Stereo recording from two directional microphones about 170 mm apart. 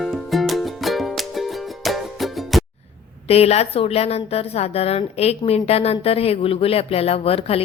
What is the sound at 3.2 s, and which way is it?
A woman's voice, 35° left (ahead or behind).